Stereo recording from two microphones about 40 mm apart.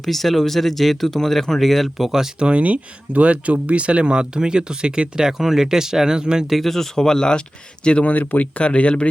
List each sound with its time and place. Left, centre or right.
0.0 s speech: centre
2.4 s speech: right
6.5 s speech: centre
7.9 s speech: left
8.1 s speech: left